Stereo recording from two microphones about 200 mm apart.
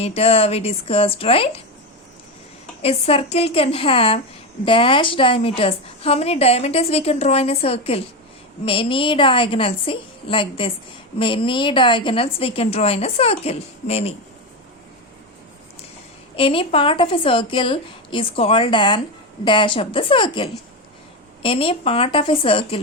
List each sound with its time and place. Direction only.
0.0 s a woman's voice: 30° left (ahead or behind)
2.8 s a woman's voice: 30° left (ahead or behind)
16.3 s a woman's voice: 25° left (ahead or behind)